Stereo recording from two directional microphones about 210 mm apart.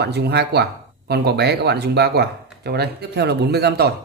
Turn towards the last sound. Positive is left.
turn(degrees=-50)  # may be behind; listen again after turning